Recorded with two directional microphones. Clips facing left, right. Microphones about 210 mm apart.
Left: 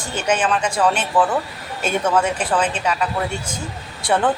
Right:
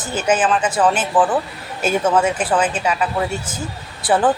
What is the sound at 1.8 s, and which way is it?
Speech, 5° right (ahead or behind).